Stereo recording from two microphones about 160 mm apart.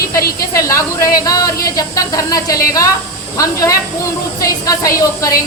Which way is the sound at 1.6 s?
20° left (ahead or behind).